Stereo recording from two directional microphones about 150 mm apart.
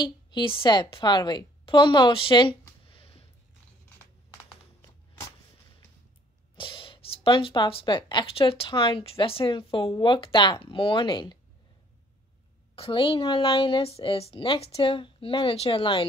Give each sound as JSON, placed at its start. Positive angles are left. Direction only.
{"t": 0.0, "sound": "speech", "side_deg": 30}
{"t": 2.8, "sound": "a sound", "side_deg": 35}
{"t": 6.5, "sound": "speech", "side_deg": 35}
{"t": 12.7, "sound": "speech", "side_deg": 35}